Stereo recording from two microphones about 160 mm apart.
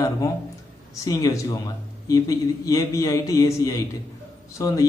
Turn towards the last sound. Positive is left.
turn(degrees=20)  # may be behind; listen again after turning